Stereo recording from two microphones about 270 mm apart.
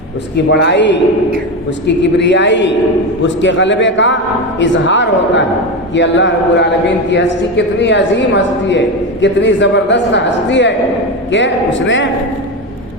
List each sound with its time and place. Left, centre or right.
0.3 s a man's voice: left
2.0 s a man's voice: left